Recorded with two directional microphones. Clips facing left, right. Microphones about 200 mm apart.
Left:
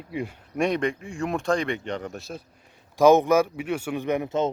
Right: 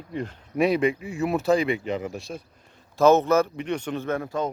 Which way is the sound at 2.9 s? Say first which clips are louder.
Left 1 dB; 15° left (ahead or behind).